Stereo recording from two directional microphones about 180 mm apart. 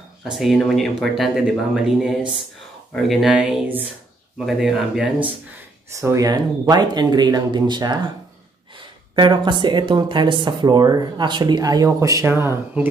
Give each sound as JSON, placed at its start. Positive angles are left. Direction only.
{"t": 0.2, "sound": "speech", "side_deg": 0}
{"t": 5.9, "sound": "speech", "side_deg": -15}
{"t": 9.1, "sound": "speech", "side_deg": -25}